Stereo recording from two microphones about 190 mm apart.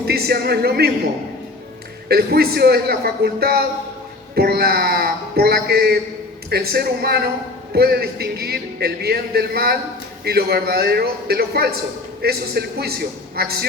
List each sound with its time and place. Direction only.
0.0 s speech: 55° right (ahead or behind)
2.0 s speech: 55° right (ahead or behind)